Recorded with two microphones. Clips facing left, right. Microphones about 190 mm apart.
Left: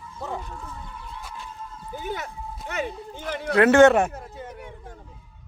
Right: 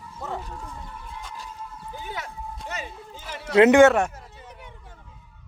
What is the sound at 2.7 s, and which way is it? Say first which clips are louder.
Speech: left 6 dB; 55° left (ahead or behind).